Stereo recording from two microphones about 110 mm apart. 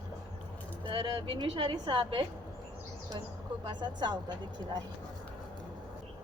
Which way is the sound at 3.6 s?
45° right (ahead or behind).